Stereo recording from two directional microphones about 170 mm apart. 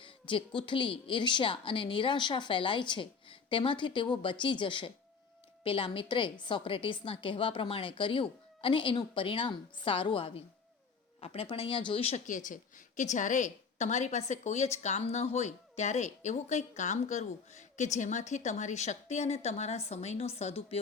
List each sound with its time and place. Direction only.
0.0 s a woman's voice: 30° left (ahead or behind)